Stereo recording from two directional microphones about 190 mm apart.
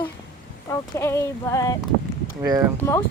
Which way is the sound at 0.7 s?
15° left (ahead or behind).